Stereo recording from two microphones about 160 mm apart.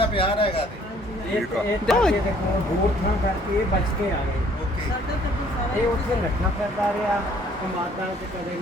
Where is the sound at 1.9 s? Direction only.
Centre (ahead or behind).